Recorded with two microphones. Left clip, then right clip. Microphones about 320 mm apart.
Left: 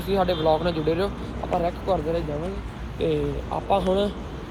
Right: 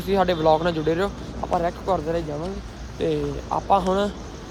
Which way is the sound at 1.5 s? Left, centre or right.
Right.